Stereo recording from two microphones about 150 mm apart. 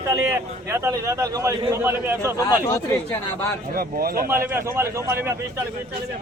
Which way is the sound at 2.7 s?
20° left (ahead or behind).